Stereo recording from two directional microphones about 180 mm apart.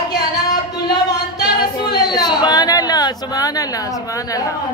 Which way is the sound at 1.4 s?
25° left (ahead or behind).